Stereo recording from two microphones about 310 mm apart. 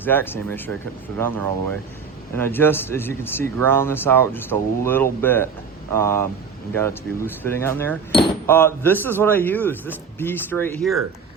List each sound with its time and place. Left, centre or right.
0.0 s speech: centre